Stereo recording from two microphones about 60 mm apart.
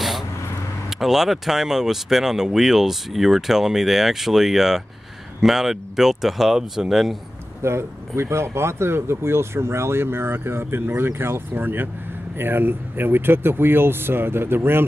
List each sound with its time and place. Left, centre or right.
0.8 s speech: centre
7.6 s speech: right